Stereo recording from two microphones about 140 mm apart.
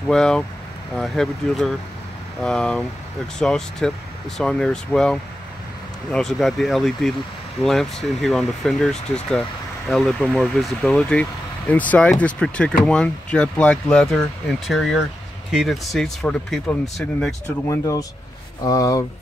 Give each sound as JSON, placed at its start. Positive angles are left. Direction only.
{"t": 0.1, "sound": "speech", "side_deg": 5}
{"t": 17.6, "sound": "speech", "side_deg": 25}